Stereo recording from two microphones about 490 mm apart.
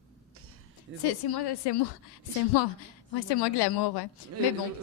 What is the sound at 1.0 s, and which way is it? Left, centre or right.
Speech, left.